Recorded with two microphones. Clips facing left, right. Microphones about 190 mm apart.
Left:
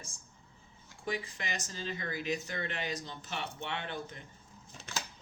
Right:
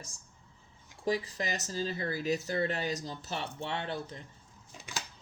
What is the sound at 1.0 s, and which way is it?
Speech, 35° right (ahead or behind).